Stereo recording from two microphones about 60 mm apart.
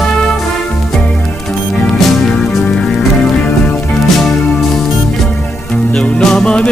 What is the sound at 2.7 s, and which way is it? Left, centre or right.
Music, centre.